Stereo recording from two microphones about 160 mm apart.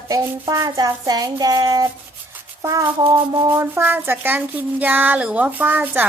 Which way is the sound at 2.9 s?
30° right (ahead or behind).